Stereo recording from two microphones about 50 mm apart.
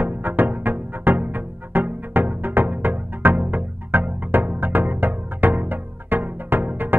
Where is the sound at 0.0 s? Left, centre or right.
Right.